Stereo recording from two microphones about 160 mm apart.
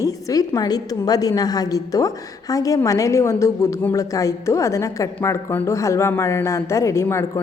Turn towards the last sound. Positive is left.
turn(degrees=15)  # may be behind; listen again after turning